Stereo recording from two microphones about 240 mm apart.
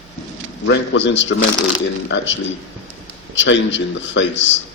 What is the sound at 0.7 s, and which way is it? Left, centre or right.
Speech, left.